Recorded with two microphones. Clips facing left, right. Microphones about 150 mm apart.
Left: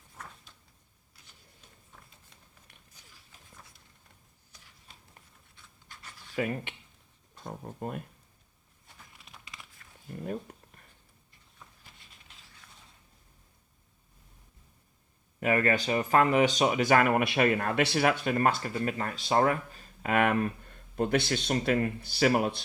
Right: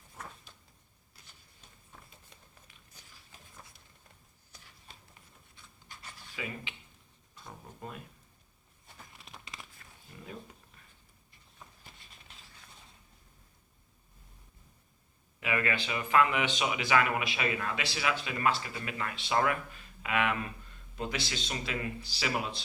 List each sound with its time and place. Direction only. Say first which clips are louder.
6.3 s speech: left 10 dB; 50° left (ahead or behind)
9.1 s crumpling: right 2 dB; 35° right (ahead or behind)
10.1 s speech: left 11 dB; 50° left (ahead or behind)
15.4 s speech: left 6 dB; 45° left (ahead or behind)